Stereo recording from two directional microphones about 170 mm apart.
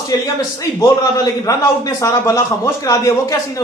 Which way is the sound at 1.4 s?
20° left (ahead or behind).